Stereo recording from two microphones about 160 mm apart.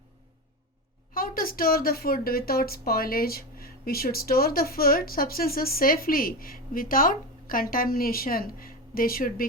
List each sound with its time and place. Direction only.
1.1 s a woman's voice: 65° left (ahead or behind)